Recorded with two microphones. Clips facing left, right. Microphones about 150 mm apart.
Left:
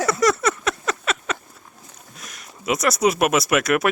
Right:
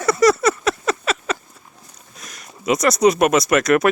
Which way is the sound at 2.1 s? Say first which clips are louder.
Right 3 dB; 5° left (ahead or behind).